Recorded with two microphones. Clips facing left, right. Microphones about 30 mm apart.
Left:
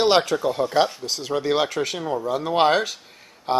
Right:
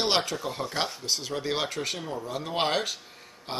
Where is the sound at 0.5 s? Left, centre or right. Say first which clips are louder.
Left 10 dB; centre.